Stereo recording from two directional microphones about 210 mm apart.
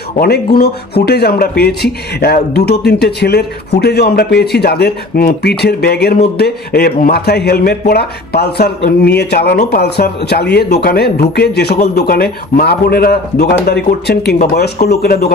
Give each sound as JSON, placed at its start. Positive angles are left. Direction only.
{"t": 0.2, "sound": "speech", "side_deg": 50}